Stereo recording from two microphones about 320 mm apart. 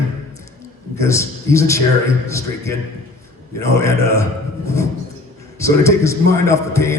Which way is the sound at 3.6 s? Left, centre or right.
Centre.